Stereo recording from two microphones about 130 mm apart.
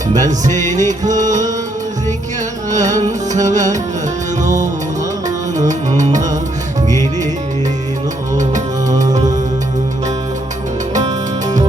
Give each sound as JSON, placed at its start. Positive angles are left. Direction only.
{"t": 0.1, "sound": "music", "side_deg": -70}
{"t": 2.6, "sound": "music", "side_deg": -70}
{"t": 8.4, "sound": "music", "side_deg": -75}